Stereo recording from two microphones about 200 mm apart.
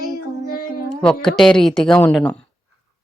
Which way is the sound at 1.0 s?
5° left (ahead or behind).